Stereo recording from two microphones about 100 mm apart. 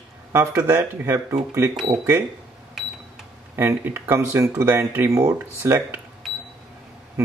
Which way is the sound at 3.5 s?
25° right (ahead or behind).